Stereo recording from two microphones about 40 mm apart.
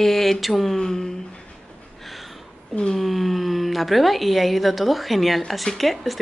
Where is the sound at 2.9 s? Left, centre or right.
Centre.